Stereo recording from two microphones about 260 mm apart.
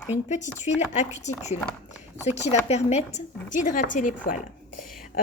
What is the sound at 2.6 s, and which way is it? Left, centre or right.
Speech, left.